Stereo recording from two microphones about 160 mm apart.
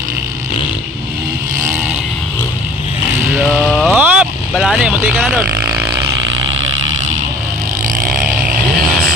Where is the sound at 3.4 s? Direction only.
5° left (ahead or behind); by 6.0 s 10° right (ahead or behind).